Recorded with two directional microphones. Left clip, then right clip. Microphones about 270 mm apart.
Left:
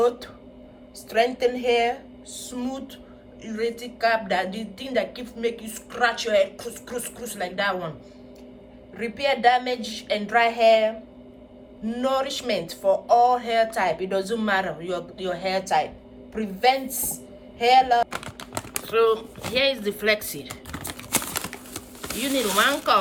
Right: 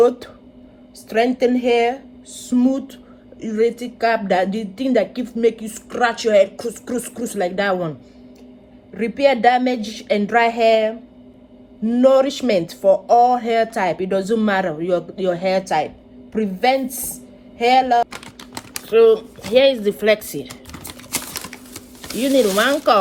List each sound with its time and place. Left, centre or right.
1.1 s a woman's voice: centre
3.4 s speech: centre
9.0 s a woman's voice: centre
18.9 s speech: centre
22.2 s speech: centre